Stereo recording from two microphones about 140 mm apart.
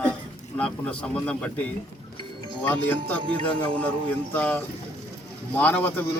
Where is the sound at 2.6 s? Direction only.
15° left (ahead or behind).